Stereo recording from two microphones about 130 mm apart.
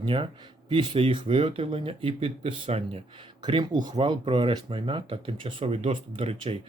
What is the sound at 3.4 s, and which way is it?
Speech, 35° right (ahead or behind).